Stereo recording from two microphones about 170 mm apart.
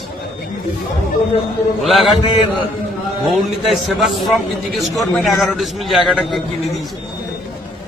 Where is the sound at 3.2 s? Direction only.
Centre (ahead or behind).